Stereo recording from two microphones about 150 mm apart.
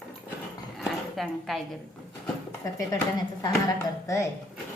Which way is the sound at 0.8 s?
Centre (ahead or behind).